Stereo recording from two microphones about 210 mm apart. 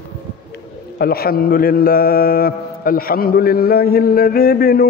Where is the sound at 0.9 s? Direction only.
45° left (ahead or behind).